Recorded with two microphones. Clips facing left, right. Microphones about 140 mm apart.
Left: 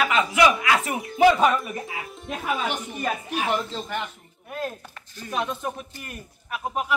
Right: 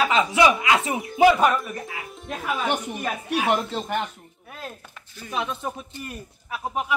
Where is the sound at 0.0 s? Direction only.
25° right (ahead or behind).